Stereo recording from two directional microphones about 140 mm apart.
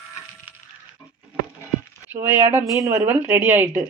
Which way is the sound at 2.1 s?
15° right (ahead or behind).